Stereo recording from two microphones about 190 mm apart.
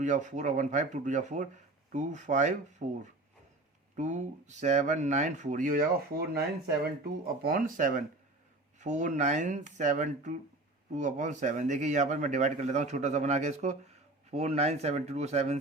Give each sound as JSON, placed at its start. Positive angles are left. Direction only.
{"t": 0.0, "sound": "speech", "side_deg": -40}